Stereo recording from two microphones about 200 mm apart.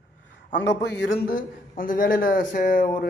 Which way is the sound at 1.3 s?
45° left (ahead or behind).